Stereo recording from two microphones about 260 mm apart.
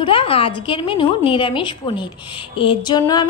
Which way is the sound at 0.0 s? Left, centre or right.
Left.